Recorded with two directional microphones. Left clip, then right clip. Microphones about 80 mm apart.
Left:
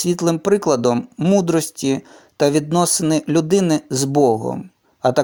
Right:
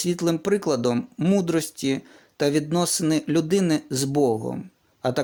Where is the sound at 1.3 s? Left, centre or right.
Left.